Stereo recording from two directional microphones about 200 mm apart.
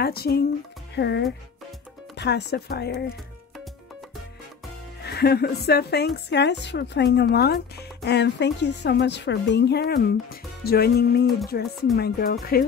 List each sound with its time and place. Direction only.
0.0 s a woman's voice: 50° left (ahead or behind)
5.0 s a woman's voice: 55° left (ahead or behind)